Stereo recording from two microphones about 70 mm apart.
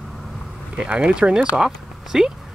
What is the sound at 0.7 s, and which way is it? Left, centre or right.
Speech, centre.